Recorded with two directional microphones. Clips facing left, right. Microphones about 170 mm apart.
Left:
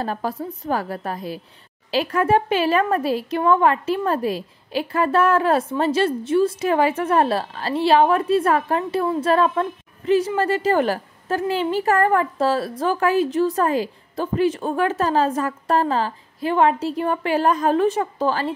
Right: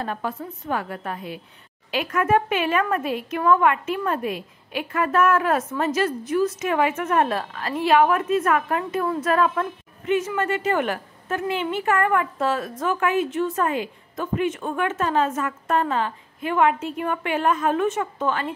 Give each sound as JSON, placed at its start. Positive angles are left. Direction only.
{"t": 0.0, "sound": "speech", "side_deg": 35}